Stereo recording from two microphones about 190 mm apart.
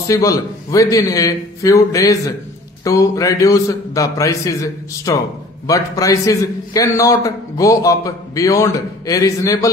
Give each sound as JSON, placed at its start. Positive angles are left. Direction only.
{"t": 0.1, "sound": "a man's voice", "side_deg": 15}